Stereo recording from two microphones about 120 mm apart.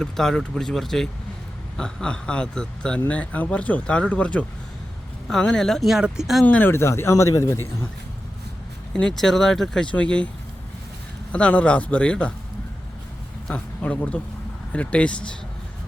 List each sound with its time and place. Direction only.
0.0 s speech: 5° left (ahead or behind)
6.4 s speech: 15° left (ahead or behind)
8.9 s speech: 5° left (ahead or behind)
11.3 s speech: 10° left (ahead or behind)
13.5 s speech: 10° left (ahead or behind)